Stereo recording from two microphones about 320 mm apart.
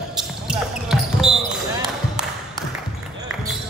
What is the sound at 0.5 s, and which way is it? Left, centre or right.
Basketball bounce, centre.